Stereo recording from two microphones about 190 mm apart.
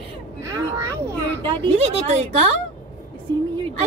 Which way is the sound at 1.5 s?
35° right (ahead or behind).